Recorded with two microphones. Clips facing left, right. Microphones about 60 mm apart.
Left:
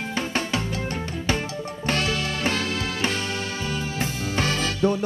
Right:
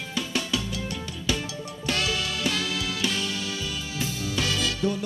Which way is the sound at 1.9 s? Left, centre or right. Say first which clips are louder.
Left 2 dB; left.